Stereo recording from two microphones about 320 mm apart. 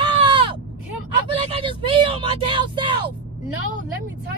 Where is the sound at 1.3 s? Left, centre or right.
Centre.